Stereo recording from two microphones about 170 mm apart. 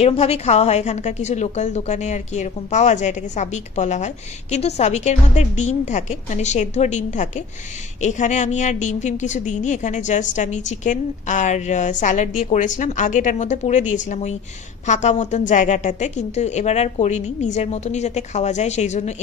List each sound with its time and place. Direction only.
0.0 s a woman's voice: 35° left (ahead or behind)